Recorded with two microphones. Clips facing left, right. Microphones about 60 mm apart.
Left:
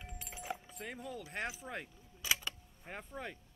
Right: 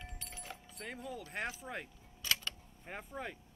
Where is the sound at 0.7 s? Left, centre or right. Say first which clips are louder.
Even; centre.